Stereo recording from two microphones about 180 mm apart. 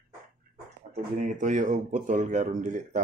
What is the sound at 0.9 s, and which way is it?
Speech, 45° right (ahead or behind).